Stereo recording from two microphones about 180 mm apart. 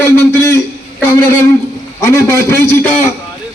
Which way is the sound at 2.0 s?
15° left (ahead or behind).